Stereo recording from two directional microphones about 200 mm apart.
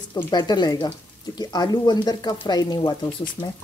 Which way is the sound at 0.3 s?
20° left (ahead or behind).